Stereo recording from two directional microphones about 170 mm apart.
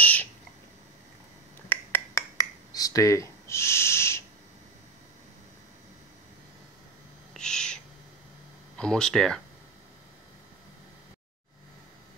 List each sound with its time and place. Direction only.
0.0 s bird: 10° left (ahead or behind)
1.7 s finger snapping: 15° left (ahead or behind)
7.3 s owl: 5° left (ahead or behind)
8.7 s speech: 5° left (ahead or behind)